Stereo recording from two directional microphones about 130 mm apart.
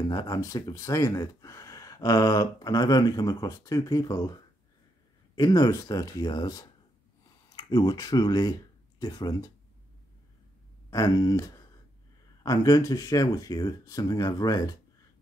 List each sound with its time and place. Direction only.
0.1 s speech: 30° left (ahead or behind)
10.9 s speech: 30° left (ahead or behind)